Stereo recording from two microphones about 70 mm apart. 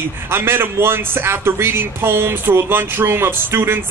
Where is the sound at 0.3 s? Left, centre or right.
Right.